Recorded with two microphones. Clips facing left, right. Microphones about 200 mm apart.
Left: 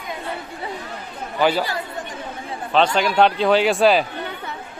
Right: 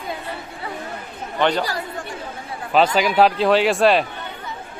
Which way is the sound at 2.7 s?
5° right (ahead or behind).